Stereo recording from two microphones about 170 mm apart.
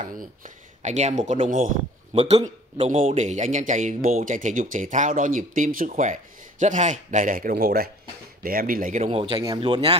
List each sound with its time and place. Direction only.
0.1 s speech: 55° right (ahead or behind); by 9.9 s 30° right (ahead or behind)